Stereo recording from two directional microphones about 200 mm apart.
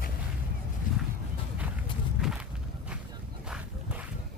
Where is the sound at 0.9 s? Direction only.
40° left (ahead or behind).